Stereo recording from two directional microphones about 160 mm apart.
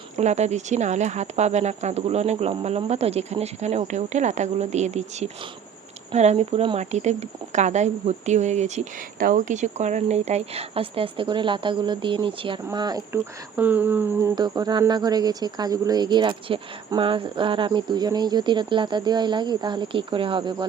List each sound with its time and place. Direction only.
0.2 s speech: 45° right (ahead or behind); by 13.0 s 25° right (ahead or behind)
13.6 s speech: 10° right (ahead or behind); by 20.7 s 30° right (ahead or behind)